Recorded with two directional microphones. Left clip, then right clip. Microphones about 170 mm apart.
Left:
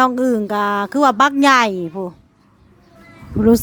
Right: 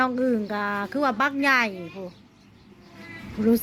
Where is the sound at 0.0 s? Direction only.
60° left (ahead or behind).